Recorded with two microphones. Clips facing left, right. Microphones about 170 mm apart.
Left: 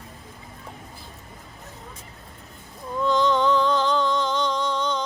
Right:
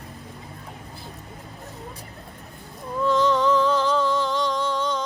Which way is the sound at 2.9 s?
Centre (ahead or behind).